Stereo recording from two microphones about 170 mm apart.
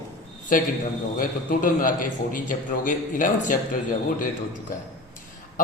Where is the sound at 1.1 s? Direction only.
55° left (ahead or behind).